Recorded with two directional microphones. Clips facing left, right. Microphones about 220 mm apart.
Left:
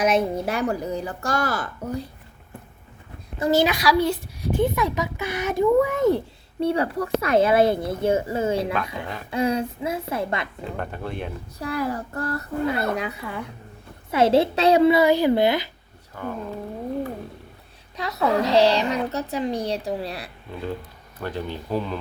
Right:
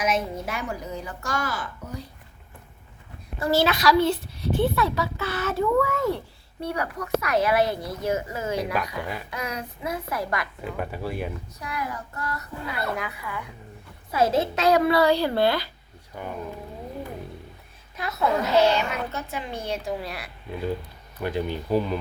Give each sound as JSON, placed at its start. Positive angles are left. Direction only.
{"t": 0.0, "sound": "a woman's voice", "side_deg": 35}
{"t": 3.3, "sound": "a woman's voice", "side_deg": 20}
{"t": 7.6, "sound": "speech", "side_deg": 55}
{"t": 7.9, "sound": "speech", "side_deg": 30}
{"t": 10.6, "sound": "speech", "side_deg": -5}
{"t": 11.6, "sound": "a woman's voice", "side_deg": 30}
{"t": 16.2, "sound": "speech", "side_deg": -15}
{"t": 17.9, "sound": "a woman's voice", "side_deg": 35}
{"t": 21.2, "sound": "speech", "side_deg": -15}